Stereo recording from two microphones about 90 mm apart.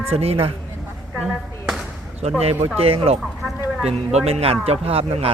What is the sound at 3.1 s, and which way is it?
Speech, 90° right.